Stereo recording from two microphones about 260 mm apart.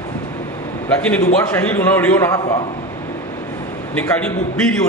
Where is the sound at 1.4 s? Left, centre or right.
Centre.